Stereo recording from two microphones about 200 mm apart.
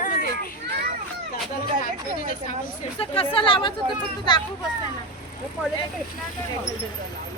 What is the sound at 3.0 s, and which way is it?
Speech, 25° left (ahead or behind).